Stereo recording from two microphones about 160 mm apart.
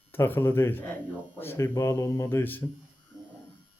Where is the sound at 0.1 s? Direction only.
15° left (ahead or behind).